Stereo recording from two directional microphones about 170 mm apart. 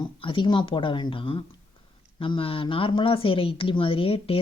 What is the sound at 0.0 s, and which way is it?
Speech, 30° left (ahead or behind).